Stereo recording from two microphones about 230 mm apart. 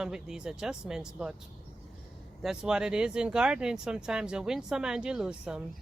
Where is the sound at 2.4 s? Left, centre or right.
Centre.